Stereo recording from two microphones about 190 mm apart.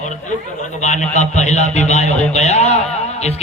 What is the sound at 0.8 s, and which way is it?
Speech, 35° left (ahead or behind).